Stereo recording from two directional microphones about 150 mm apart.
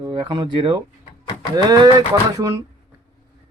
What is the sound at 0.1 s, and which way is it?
A man's voice, 35° right (ahead or behind).